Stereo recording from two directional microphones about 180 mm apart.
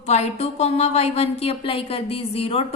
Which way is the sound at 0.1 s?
35° left (ahead or behind).